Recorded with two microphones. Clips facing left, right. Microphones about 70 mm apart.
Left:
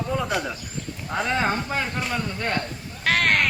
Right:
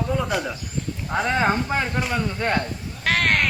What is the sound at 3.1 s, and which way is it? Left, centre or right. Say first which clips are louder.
Sheep: even; centre.